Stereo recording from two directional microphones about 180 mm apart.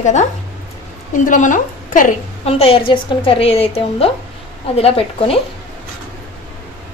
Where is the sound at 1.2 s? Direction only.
45° left (ahead or behind).